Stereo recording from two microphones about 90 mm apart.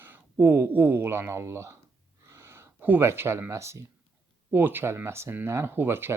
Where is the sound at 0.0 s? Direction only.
25° right (ahead or behind).